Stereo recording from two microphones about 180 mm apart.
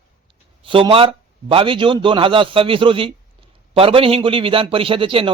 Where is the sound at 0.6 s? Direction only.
30° right (ahead or behind).